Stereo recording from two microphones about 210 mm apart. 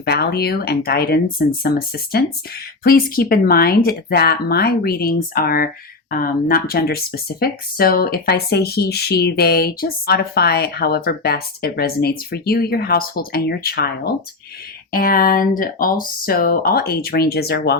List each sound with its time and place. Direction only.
0.0 s speech: 50° left (ahead or behind)